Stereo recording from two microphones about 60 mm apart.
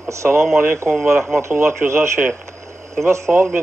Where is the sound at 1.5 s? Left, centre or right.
Right.